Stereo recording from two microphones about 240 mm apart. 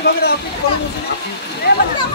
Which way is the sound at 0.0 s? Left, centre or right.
Left.